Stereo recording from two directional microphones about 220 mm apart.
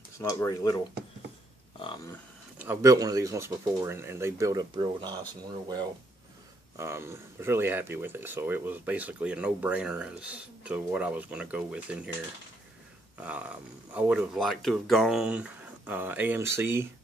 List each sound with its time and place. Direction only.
0.2 s speech: 15° left (ahead or behind)
2.6 s speech: 10° right (ahead or behind)
6.8 s speech: 10° right (ahead or behind)
13.2 s speech: 5° right (ahead or behind)